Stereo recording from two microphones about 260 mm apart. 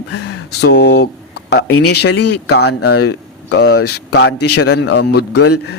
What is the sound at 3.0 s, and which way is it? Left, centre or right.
Speech, left.